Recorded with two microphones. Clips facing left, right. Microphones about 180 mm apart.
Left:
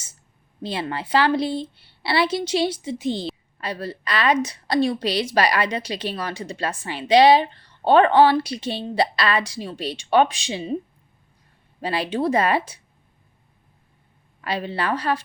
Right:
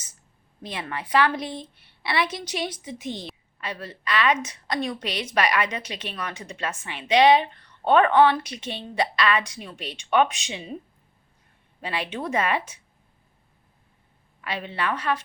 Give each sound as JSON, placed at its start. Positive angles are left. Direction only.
{"t": 0.6, "sound": "a woman's voice", "side_deg": 30}
{"t": 11.8, "sound": "a woman's voice", "side_deg": 35}
{"t": 14.4, "sound": "a woman's voice", "side_deg": 35}